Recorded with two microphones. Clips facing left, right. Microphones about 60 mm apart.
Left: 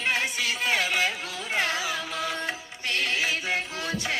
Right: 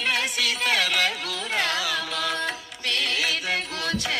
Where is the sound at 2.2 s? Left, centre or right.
Right.